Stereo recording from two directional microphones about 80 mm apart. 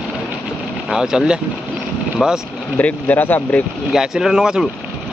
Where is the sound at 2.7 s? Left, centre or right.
Left.